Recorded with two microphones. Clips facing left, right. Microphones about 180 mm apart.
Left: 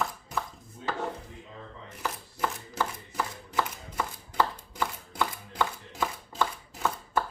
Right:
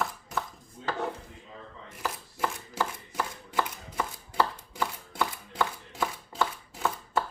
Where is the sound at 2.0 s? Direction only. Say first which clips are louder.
Even; 5° right (ahead or behind).